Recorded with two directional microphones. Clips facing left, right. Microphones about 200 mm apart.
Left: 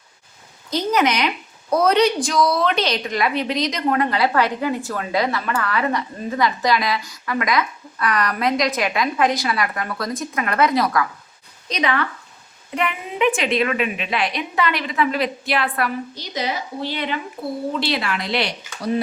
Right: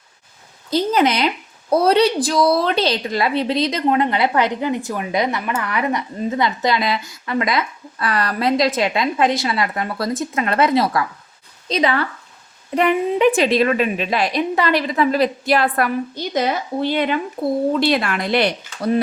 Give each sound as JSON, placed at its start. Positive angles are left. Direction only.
{"t": 0.7, "sound": "a woman's voice", "side_deg": -30}